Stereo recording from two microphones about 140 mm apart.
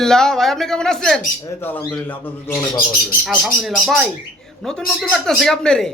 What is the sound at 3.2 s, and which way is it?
A man's voice, 5° right (ahead or behind).